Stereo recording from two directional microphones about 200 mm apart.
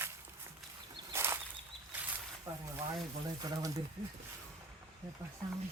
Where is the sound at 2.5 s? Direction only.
20° right (ahead or behind).